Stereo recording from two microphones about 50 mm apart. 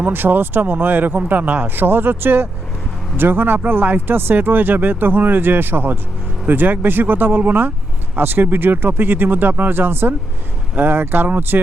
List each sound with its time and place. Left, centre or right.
0.0 s speech: right